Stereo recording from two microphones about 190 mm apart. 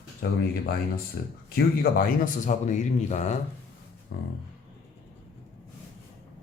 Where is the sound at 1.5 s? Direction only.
50° left (ahead or behind).